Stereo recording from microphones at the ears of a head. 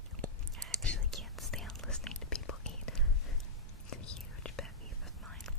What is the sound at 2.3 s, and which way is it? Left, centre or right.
Whispering, left.